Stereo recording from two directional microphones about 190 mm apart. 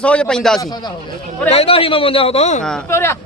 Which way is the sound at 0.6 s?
20° left (ahead or behind).